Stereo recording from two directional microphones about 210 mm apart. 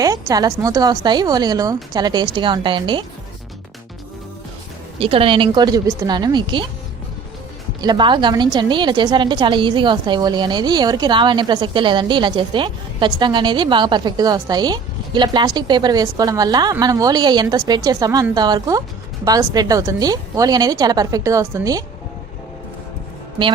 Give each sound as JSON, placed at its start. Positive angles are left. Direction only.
{"t": 0.0, "sound": "a woman's voice", "side_deg": -15}
{"t": 4.9, "sound": "a woman's voice", "side_deg": -25}
{"t": 7.8, "sound": "a woman's voice", "side_deg": -20}